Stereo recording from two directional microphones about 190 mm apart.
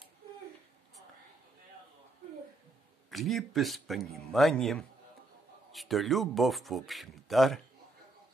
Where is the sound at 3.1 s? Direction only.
Centre (ahead or behind).